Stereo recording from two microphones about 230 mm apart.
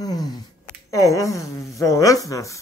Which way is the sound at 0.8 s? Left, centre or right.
Centre.